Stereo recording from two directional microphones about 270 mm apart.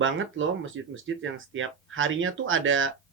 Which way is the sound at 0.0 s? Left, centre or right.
Right.